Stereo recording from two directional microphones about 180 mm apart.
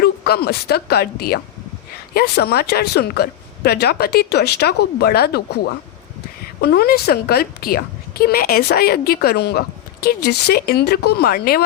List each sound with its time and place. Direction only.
0.0 s a woman's voice: 60° left (ahead or behind)
6.6 s a woman's voice: 65° left (ahead or behind)